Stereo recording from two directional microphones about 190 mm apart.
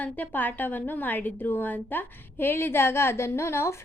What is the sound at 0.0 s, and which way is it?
A woman's voice, 10° left (ahead or behind).